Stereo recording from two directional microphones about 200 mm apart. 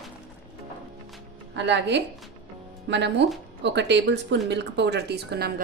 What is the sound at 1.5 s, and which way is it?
A woman's voice, 60° right (ahead or behind).